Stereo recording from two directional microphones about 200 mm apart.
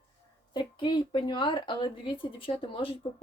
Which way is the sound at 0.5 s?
20° left (ahead or behind).